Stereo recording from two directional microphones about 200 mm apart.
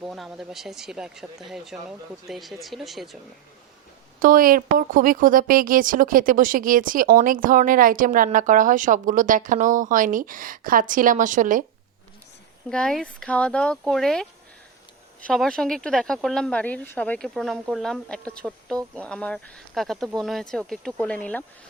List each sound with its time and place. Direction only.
0.0 s speech: centre (ahead or behind)
4.2 s a woman's voice: 45° right (ahead or behind)
12.6 s speech: 5° left (ahead or behind)
15.3 s speech: centre (ahead or behind)